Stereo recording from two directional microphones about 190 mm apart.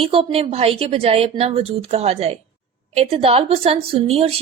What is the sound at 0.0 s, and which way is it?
A woman's voice, 30° right (ahead or behind).